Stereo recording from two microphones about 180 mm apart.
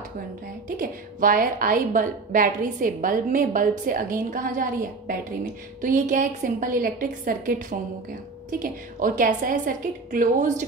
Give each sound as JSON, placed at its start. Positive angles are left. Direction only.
{"t": 0.7, "sound": "a woman's voice", "side_deg": -50}